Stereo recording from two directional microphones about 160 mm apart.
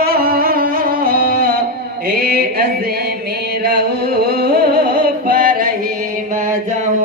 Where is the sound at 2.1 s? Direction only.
75° right (ahead or behind).